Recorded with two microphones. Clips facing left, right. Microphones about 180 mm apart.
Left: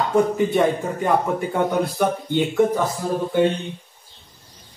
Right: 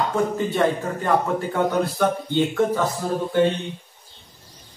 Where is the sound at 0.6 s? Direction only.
15° left (ahead or behind).